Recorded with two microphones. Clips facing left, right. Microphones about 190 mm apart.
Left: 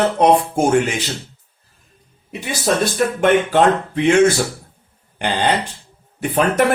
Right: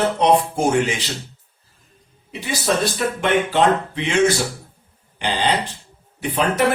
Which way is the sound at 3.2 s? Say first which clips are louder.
Left 3 dB; 50° left (ahead or behind).